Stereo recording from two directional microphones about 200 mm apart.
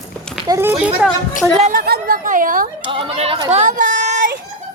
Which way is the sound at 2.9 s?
25° right (ahead or behind).